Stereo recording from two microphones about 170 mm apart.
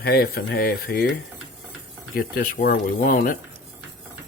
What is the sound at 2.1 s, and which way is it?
Speech, 60° left (ahead or behind).